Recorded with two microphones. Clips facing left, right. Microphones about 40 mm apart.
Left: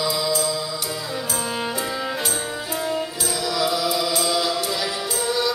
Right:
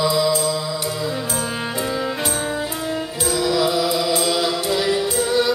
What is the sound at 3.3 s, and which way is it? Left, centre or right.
Music, centre.